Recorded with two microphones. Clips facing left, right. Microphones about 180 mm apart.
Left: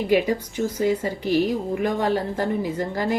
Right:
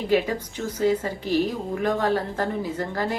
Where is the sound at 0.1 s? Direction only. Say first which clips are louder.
Left 1 dB; 15° left (ahead or behind).